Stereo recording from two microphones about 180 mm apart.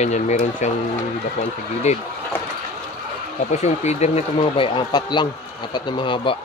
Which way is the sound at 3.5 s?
40° left (ahead or behind).